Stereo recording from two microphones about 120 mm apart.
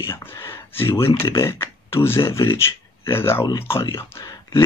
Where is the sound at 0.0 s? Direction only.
20° left (ahead or behind).